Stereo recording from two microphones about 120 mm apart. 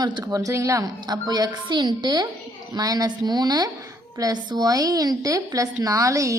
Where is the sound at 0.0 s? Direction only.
35° right (ahead or behind).